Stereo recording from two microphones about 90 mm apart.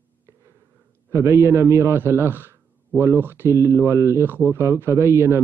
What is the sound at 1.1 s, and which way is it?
A man's voice, 30° right (ahead or behind).